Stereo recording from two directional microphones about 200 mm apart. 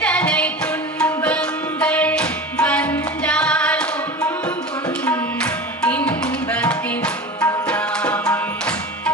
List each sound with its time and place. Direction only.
0.0 s music: 5° left (ahead or behind)
7.7 s tabla: 5° left (ahead or behind)